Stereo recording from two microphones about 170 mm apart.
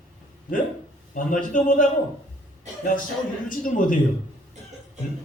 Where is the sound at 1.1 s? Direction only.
50° left (ahead or behind).